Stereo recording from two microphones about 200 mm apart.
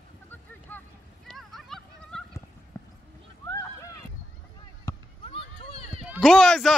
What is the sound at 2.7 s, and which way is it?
Clip-clop, 15° left (ahead or behind).